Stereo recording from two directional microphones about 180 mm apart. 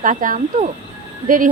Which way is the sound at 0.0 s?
50° right (ahead or behind).